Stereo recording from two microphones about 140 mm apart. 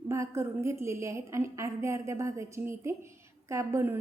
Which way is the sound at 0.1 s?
20° right (ahead or behind).